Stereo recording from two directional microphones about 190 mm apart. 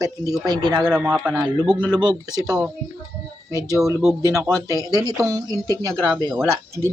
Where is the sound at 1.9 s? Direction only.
20° right (ahead or behind).